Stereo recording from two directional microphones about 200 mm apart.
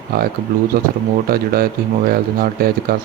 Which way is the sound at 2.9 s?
50° right (ahead or behind).